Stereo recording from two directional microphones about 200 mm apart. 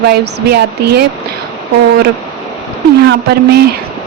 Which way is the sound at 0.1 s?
55° right (ahead or behind).